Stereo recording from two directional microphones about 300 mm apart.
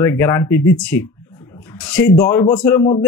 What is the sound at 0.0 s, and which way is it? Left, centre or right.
Speech, centre.